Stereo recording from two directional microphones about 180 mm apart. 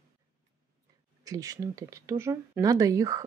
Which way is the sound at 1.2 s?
20° right (ahead or behind).